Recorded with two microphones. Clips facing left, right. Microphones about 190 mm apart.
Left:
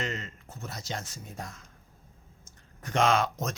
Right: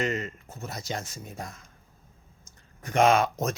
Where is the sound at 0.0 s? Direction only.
10° right (ahead or behind).